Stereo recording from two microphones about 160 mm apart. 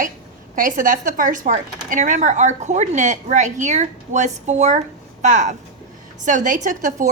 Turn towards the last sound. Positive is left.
turn(degrees=-50)  # may be behind; listen again after turning